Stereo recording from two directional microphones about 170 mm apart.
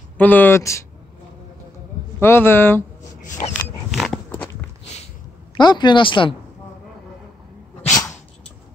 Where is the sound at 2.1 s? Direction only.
15° left (ahead or behind).